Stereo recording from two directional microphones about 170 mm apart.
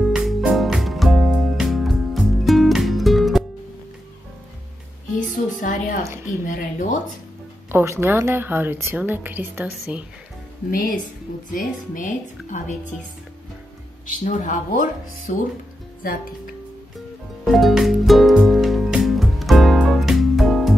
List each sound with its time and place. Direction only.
0.1 s music: centre (ahead or behind)
5.3 s music: 50° left (ahead or behind)
6.2 s a woman's voice: 50° left (ahead or behind)
7.7 s a woman's voice: 15° right (ahead or behind)
10.7 s a woman's voice: 55° left (ahead or behind)
14.0 s a woman's voice: 45° left (ahead or behind)
17.5 s music: centre (ahead or behind)